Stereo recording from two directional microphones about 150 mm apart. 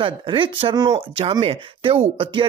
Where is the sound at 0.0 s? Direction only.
35° right (ahead or behind).